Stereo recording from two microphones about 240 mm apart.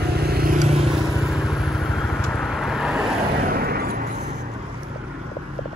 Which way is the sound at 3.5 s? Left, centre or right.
Right.